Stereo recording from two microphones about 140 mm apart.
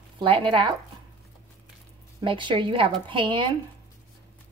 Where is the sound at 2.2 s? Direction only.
35° right (ahead or behind).